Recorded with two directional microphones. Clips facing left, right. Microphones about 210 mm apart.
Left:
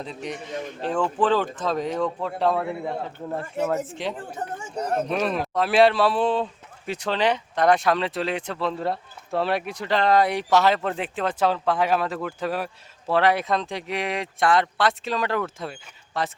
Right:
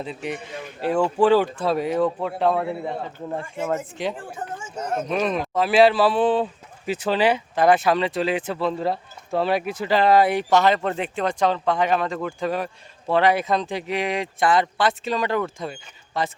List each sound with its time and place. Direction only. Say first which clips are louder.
0.0 s a man's voice: right 3 dB; 5° right (ahead or behind)
4.3 s speech: left 1 dB; 35° left (ahead or behind)
5.0 s a man's voice: right 1 dB; centre (ahead or behind)